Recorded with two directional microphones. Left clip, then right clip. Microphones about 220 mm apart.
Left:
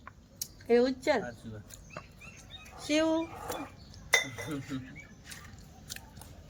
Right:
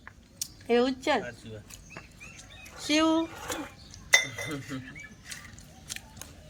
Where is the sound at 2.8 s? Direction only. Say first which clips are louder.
Right 3 dB; 20° right (ahead or behind).